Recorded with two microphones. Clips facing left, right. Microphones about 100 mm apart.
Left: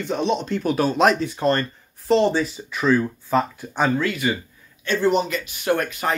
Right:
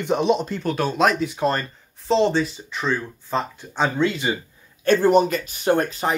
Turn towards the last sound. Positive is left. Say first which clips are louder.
# right 2 dB
turn(degrees=-30)  # may be behind; listen again after turning